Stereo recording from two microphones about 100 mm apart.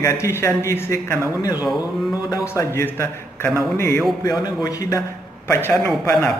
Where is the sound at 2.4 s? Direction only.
30° left (ahead or behind).